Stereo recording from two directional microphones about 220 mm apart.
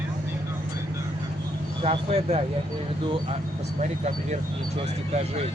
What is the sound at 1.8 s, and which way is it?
Speech, 25° right (ahead or behind).